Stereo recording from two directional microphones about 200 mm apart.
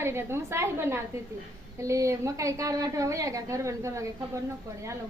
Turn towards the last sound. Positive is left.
turn(degrees=-15)  # may be behind; listen again after turning